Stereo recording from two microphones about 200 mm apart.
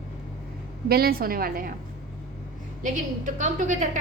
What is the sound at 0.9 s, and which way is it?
Speech, 50° right (ahead or behind).